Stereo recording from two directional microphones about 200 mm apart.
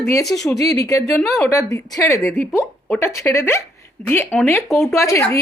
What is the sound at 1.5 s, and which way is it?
A woman's voice, 15° left (ahead or behind).